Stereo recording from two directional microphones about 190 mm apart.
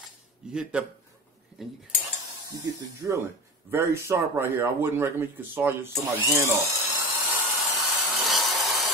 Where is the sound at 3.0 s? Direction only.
10° right (ahead or behind).